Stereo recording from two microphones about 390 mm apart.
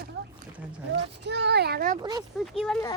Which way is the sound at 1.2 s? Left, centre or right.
Right.